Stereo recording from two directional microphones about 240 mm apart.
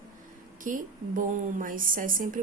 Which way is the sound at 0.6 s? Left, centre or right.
Right.